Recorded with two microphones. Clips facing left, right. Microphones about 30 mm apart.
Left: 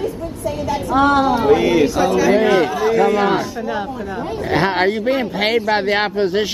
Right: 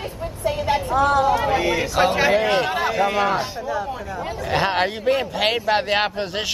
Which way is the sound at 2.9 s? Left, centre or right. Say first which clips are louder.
Left 6 dB; centre.